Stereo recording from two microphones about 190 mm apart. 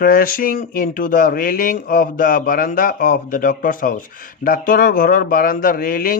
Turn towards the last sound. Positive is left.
turn(degrees=50)  # may be behind; listen again after turning